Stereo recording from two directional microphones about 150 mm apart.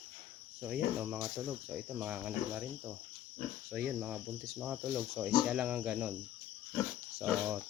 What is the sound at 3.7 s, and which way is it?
Cricket, 5° right (ahead or behind).